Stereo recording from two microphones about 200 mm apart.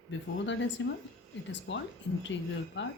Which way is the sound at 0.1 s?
65° left (ahead or behind).